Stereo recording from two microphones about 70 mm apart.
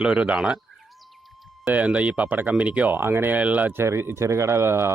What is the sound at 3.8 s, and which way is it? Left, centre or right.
Speech, right.